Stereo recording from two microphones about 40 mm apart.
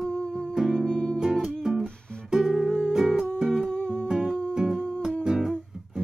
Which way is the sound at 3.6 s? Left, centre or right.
Left.